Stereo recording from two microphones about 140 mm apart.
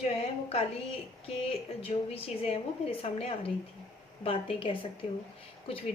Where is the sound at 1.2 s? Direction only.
45° left (ahead or behind).